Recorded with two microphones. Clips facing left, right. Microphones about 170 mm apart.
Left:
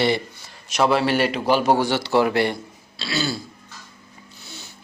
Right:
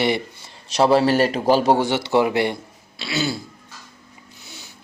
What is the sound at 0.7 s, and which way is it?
A man's voice, 35° right (ahead or behind).